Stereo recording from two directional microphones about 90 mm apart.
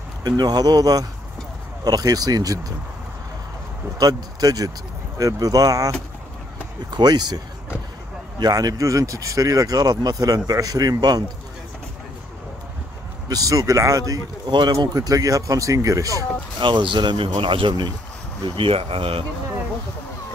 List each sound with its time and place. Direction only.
0.2 s speech: 50° right (ahead or behind)
4.0 s speech: 45° right (ahead or behind)
6.9 s speech: 50° right (ahead or behind)
8.4 s speech: 45° right (ahead or behind)
13.3 s speech: 40° right (ahead or behind)
15.0 s speech: 40° right (ahead or behind)
16.5 s speech: 65° right (ahead or behind)
18.6 s speech: 85° right